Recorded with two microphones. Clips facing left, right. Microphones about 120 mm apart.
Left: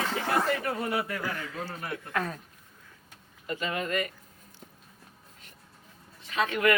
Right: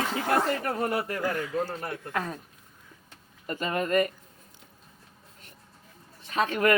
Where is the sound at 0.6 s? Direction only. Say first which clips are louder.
Right 2 dB; 45° right (ahead or behind).